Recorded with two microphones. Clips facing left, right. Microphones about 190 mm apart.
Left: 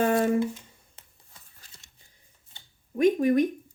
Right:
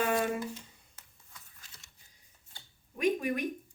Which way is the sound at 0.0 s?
40° left (ahead or behind).